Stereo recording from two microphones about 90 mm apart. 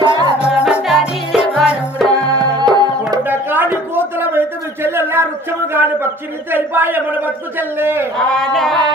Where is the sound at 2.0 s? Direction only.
45° right (ahead or behind).